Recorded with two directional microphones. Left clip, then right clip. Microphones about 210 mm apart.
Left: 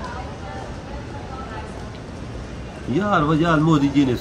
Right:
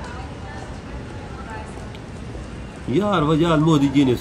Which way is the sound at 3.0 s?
20° right (ahead or behind).